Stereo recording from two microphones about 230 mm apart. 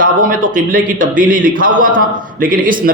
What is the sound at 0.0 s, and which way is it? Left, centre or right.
A man's voice, right.